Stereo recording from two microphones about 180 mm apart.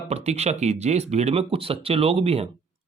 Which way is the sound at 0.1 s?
35° right (ahead or behind).